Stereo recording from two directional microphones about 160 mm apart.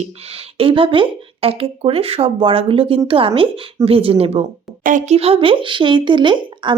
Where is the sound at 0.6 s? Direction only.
35° right (ahead or behind).